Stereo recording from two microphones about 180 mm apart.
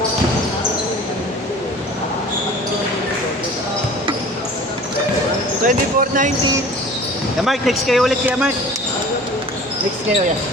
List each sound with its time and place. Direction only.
5.6 s speech: 45° right (ahead or behind)
7.4 s speech: centre (ahead or behind)